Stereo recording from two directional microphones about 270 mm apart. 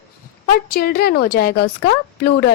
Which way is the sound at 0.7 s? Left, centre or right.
Left.